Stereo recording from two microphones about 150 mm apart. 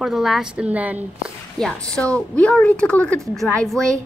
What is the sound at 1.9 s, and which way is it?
A woman's voice, 5° left (ahead or behind).